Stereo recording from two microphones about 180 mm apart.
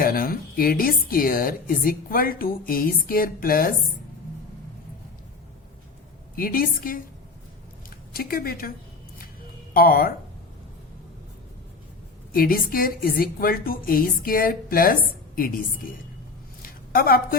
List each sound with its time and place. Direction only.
0.0 s a woman's voice: 55° left (ahead or behind)
6.3 s a woman's voice: 55° left (ahead or behind)
9.7 s a woman's voice: 50° left (ahead or behind)
12.3 s a woman's voice: 55° left (ahead or behind)
16.6 s a sound: 55° left (ahead or behind)